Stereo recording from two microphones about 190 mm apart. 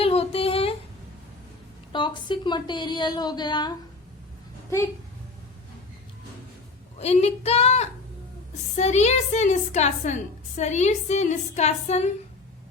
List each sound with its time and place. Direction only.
0.0 s a sound: 30° left (ahead or behind)
1.9 s a woman's voice: 25° left (ahead or behind)
7.0 s a woman's voice: 35° left (ahead or behind)